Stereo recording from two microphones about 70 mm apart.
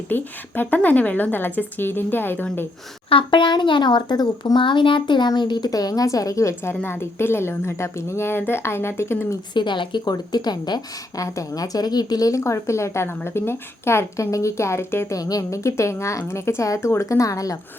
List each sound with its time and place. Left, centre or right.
0.1 s a woman's voice: left
3.5 s a woman's voice: left
9.6 s a woman's voice: left
11.2 s a woman's voice: left
12.4 s a woman's voice: left
15.1 s a woman's voice: left